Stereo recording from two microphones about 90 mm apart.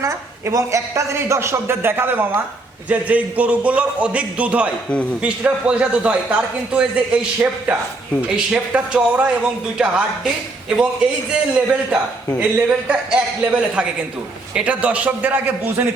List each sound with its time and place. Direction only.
0.0 s a man's voice: 35° right (ahead or behind); by 15.9 s 20° right (ahead or behind)